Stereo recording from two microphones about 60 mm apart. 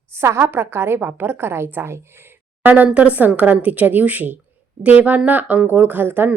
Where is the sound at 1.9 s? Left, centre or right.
Right.